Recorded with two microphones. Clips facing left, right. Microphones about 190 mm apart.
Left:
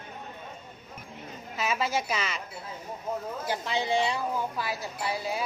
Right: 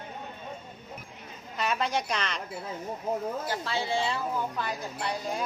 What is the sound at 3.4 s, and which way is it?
A woman's voice, 15° left (ahead or behind).